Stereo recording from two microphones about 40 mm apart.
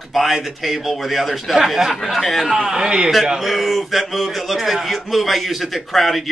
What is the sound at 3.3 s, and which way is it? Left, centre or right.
Speech, centre.